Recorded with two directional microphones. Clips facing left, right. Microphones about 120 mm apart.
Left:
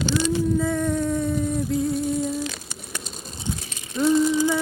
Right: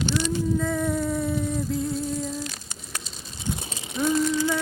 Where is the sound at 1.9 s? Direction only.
65° left (ahead or behind).